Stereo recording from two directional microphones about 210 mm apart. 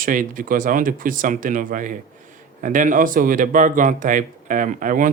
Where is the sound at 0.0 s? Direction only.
40° right (ahead or behind).